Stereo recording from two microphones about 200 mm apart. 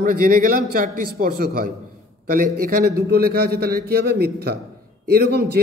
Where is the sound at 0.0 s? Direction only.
45° right (ahead or behind).